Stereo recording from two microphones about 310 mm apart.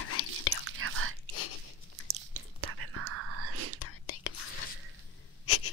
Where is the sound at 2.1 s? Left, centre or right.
Right.